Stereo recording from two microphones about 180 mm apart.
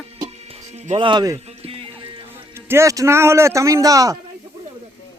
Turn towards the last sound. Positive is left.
turn(degrees=-20)  # may be behind; listen again after turning